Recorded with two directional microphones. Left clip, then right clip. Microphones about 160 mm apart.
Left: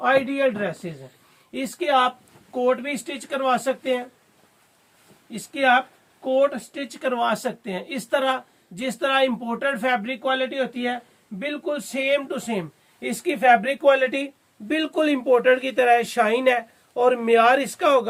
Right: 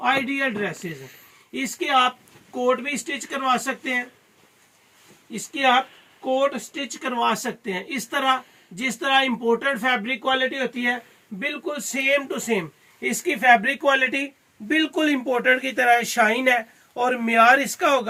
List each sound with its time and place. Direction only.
1.5 s speech: 35° left (ahead or behind)
5.3 s speech: 35° left (ahead or behind); by 18.1 s 60° left (ahead or behind)